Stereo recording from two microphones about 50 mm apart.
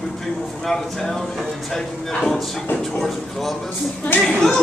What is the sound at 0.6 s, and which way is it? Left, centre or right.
Speech, centre.